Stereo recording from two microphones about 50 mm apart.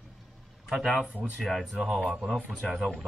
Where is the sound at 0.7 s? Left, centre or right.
Centre.